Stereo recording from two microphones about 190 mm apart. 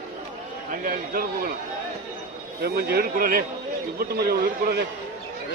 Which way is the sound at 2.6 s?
55° right (ahead or behind).